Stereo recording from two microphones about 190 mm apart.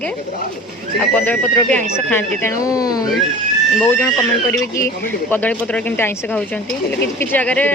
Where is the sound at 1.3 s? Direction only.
5° left (ahead or behind).